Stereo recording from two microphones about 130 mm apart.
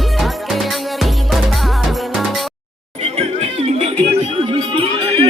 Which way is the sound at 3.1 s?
50° right (ahead or behind).